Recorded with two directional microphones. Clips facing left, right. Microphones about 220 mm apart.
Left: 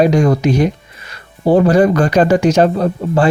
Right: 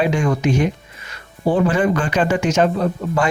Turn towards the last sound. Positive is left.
turn(degrees=35)  # may be behind; listen again after turning